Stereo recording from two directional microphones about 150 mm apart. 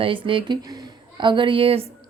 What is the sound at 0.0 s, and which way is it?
Speech, 35° right (ahead or behind).